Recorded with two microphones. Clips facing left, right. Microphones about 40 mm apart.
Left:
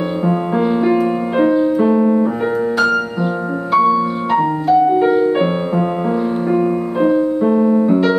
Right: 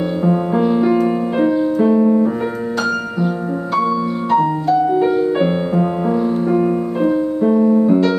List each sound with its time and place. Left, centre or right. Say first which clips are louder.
0.3 s music: right 1 dB; centre
3.7 s music: left 5 dB; centre